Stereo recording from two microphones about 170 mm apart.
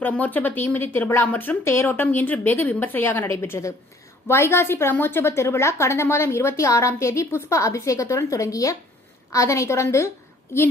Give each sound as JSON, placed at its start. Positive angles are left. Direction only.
{"t": 0.0, "sound": "a woman's voice", "side_deg": 10}